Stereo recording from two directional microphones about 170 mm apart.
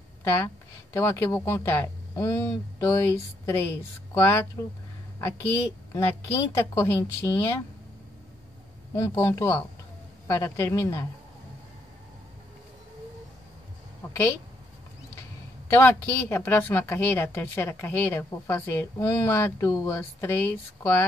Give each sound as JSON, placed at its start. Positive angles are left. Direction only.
{"t": 0.9, "sound": "a woman's voice", "side_deg": 15}
{"t": 8.9, "sound": "a woman's voice", "side_deg": 15}
{"t": 15.7, "sound": "a woman's voice", "side_deg": 15}